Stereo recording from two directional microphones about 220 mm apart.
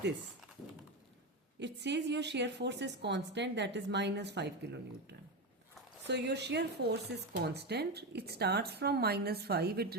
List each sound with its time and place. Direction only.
1.5 s speech: 50° right (ahead or behind)
6.1 s speech: 50° right (ahead or behind)